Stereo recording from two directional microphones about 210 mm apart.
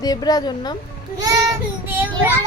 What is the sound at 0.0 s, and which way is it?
Speech, 20° left (ahead or behind).